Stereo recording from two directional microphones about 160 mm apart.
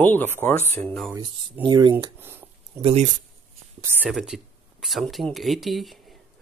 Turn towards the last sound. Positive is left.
turn(degrees=0)  # may be behind; listen again after turning